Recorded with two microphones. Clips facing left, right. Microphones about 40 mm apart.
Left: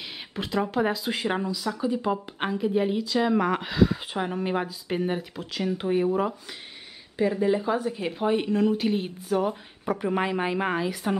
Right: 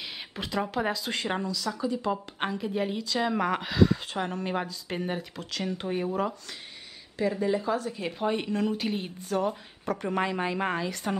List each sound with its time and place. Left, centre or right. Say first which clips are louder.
0.4 s a woman's voice: left 4 dB; centre
2.4 s a woman's voice: left 5 dB; centre